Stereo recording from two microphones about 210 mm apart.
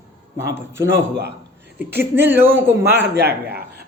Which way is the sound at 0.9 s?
55° right (ahead or behind).